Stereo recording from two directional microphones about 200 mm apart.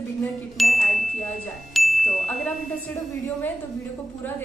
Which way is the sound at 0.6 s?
Centre (ahead or behind).